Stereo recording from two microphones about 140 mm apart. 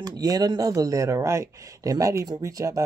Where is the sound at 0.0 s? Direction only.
25° right (ahead or behind).